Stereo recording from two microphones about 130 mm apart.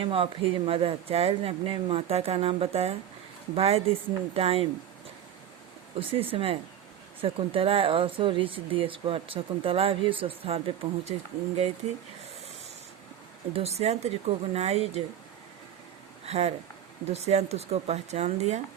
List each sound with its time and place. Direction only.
0.0 s speech: 40° right (ahead or behind)
6.0 s speech: 45° right (ahead or behind)
13.5 s speech: 55° right (ahead or behind)
16.2 s speech: 50° right (ahead or behind)